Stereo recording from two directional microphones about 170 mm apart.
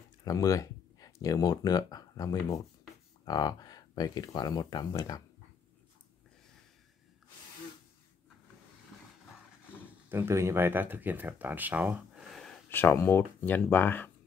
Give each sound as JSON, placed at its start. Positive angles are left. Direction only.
{"t": 0.2, "sound": "speech", "side_deg": 20}
{"t": 10.0, "sound": "speech", "side_deg": -15}
{"t": 12.6, "sound": "speech", "side_deg": 15}